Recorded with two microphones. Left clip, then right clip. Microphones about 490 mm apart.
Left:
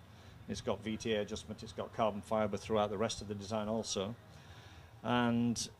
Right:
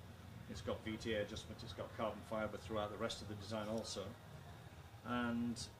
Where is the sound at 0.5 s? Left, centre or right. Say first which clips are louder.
Left 7 dB; left.